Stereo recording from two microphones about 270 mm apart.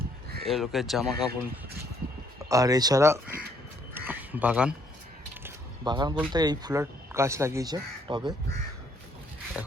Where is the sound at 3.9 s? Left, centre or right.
Centre.